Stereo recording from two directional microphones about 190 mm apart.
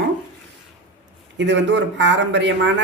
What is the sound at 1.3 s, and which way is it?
Speech, 70° right (ahead or behind).